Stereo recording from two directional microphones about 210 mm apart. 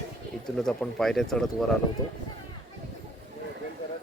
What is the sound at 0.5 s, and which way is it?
Speech, centre (ahead or behind).